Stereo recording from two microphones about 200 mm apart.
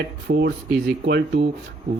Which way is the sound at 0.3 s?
55° right (ahead or behind).